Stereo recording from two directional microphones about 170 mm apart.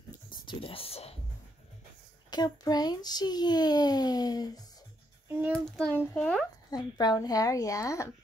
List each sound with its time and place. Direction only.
0.5 s speech: 30° left (ahead or behind)
2.3 s a child's voice: 25° left (ahead or behind)
5.3 s a child's voice: 10° right (ahead or behind)
5.8 s a child's voice: 5° left (ahead or behind)
6.7 s a child's voice: 25° left (ahead or behind)